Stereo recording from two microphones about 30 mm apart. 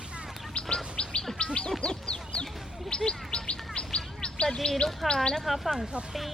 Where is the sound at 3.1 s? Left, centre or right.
Left.